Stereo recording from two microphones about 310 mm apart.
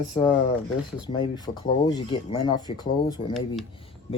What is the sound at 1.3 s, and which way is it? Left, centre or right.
Speech, centre.